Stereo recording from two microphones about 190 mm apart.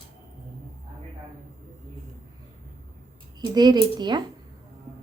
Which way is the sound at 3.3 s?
20° right (ahead or behind).